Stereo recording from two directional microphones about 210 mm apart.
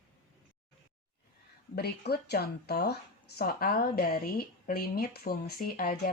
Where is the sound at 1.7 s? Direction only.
50° left (ahead or behind).